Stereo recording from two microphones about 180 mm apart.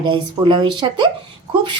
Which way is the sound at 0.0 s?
25° right (ahead or behind).